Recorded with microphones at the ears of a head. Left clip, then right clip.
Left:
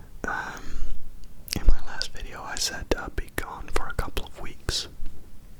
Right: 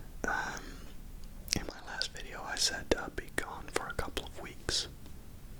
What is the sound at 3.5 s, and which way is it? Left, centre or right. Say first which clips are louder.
Whispering: left 5 dB; left.